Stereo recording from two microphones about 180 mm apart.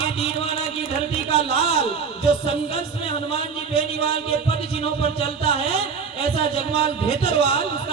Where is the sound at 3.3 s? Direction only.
30° left (ahead or behind).